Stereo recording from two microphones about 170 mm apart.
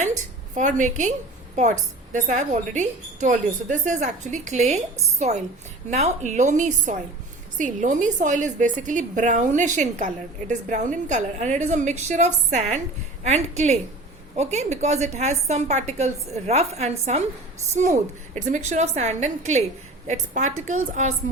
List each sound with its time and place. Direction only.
0.5 s a woman's voice: 45° right (ahead or behind)
18.3 s a woman's voice: 45° right (ahead or behind)